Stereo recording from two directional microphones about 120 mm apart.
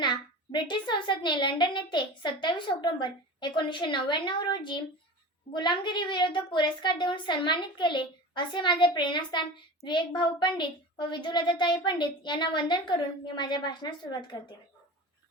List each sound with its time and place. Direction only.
0.0 s a woman's voice: 40° left (ahead or behind)